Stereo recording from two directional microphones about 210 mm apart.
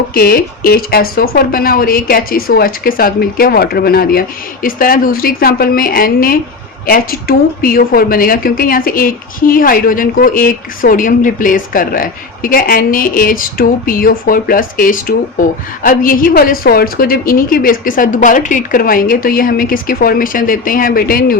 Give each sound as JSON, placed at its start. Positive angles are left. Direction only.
{"t": 0.1, "sound": "a woman's voice", "side_deg": 45}